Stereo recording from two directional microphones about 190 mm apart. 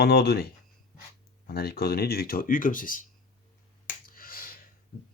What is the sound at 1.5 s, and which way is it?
Speech, 55° left (ahead or behind).